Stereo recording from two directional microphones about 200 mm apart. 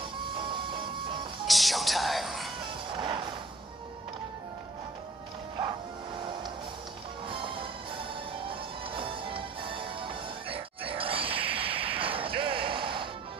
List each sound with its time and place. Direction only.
0.5 s train: 25° right (ahead or behind)
1.4 s music: centre (ahead or behind)
2.9 s music: 25° right (ahead or behind)
8.5 s music: 25° right (ahead or behind)